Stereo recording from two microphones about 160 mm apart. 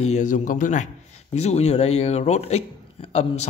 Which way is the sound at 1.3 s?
40° left (ahead or behind).